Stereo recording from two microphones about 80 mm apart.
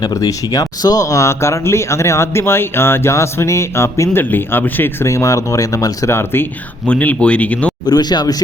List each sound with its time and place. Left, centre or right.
0.1 s speech: left
6.1 s speech: left
6.8 s speech: centre
7.9 s speech: left